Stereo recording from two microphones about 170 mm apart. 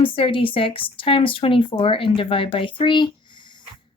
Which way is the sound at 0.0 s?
30° left (ahead or behind).